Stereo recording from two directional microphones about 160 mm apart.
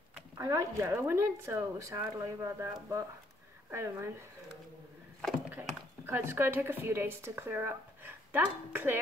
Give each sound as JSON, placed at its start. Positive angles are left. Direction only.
{"t": 0.4, "sound": "speech", "side_deg": -20}
{"t": 6.0, "sound": "speech", "side_deg": -15}